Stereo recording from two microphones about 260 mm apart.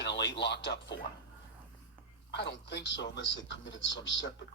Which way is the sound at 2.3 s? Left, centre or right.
Left.